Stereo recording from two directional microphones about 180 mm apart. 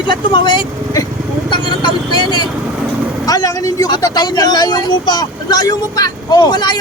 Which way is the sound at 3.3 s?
20° left (ahead or behind).